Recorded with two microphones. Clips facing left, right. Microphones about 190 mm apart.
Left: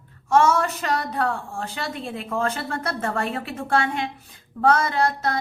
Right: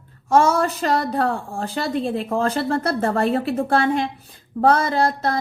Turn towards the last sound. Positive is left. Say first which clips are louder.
# right 3 dB
turn(degrees=-30)  # may be behind; listen again after turning